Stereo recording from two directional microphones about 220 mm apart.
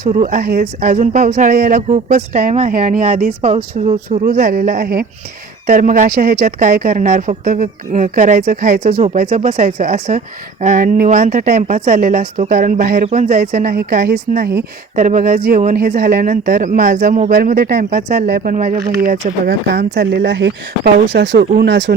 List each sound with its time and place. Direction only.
0.1 s speech: 35° right (ahead or behind)
9.0 s speech: 30° right (ahead or behind); by 21.9 s 50° right (ahead or behind)